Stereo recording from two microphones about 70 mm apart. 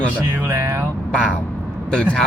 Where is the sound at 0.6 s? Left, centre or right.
Right.